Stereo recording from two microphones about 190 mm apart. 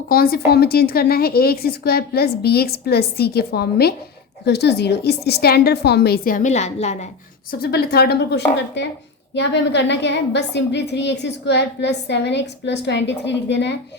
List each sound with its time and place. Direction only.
0.1 s a woman's voice: 55° left (ahead or behind); by 7.1 s 35° left (ahead or behind)
7.6 s a woman's voice: 55° left (ahead or behind)